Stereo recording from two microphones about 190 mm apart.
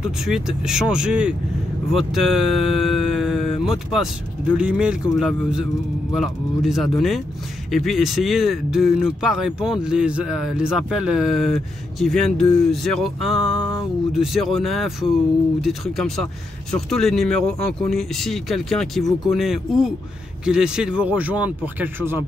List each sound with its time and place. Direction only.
0.0 s speech: 5° right (ahead or behind)